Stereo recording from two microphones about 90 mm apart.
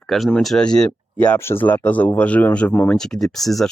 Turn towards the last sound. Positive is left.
turn(degrees=0)  # may be behind; listen again after turning